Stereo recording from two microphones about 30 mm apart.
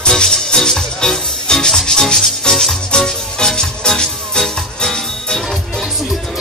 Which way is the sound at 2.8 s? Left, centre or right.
Left.